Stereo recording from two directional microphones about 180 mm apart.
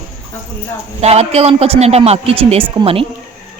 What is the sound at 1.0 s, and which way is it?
A man's voice, 35° right (ahead or behind).